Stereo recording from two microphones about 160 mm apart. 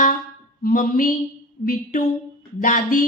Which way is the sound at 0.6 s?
60° left (ahead or behind).